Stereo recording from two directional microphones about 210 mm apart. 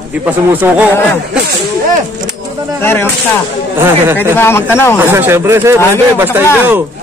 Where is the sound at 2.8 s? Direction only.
10° left (ahead or behind).